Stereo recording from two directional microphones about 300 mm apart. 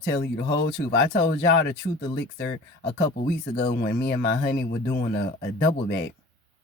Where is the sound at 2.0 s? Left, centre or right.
Left.